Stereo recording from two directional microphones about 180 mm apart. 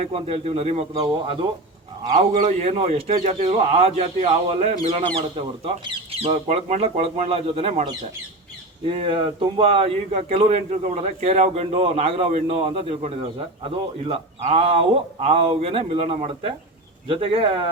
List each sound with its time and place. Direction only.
0.1 s a man's voice: 35° right (ahead or behind)
2.1 s a man's voice: 40° right (ahead or behind)
5.0 s a man's voice: 30° right (ahead or behind)